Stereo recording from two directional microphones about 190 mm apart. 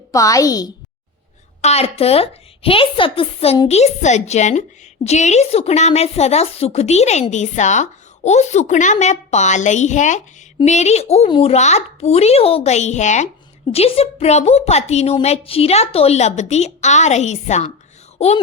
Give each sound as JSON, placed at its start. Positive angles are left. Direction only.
{"t": 0.1, "sound": "speech", "side_deg": 15}
{"t": 1.6, "sound": "a woman's voice", "side_deg": 30}